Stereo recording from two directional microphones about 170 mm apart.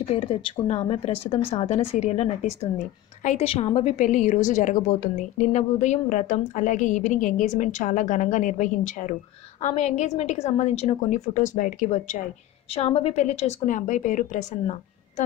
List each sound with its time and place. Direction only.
0.1 s a woman's voice: 30° left (ahead or behind)